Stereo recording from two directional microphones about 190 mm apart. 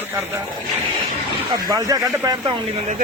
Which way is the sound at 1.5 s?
20° right (ahead or behind).